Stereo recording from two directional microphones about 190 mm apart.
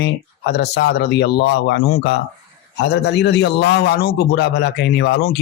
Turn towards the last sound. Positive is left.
turn(degrees=60)  # may be behind; listen again after turning